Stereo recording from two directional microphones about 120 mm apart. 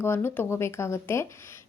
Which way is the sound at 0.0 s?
20° left (ahead or behind).